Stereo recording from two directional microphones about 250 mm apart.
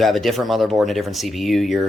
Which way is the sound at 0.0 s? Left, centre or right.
Centre.